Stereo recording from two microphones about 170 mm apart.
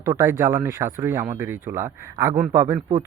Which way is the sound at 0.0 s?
20° right (ahead or behind).